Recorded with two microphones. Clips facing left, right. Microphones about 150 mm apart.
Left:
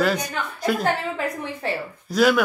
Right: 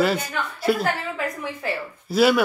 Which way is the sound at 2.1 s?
5° right (ahead or behind).